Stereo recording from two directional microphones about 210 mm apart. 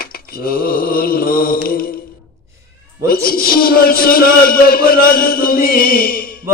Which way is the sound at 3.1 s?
45° left (ahead or behind).